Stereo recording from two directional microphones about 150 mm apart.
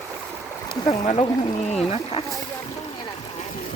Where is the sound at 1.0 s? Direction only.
50° left (ahead or behind).